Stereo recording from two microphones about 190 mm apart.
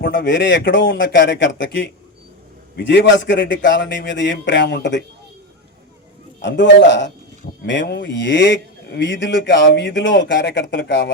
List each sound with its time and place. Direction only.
0.0 s a man's voice: 70° left (ahead or behind)
6.4 s a man's voice: 70° left (ahead or behind)